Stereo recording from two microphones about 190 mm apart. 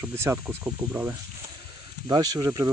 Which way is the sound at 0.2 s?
10° right (ahead or behind).